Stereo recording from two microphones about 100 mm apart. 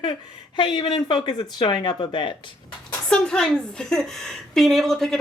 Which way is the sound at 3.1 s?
5° left (ahead or behind).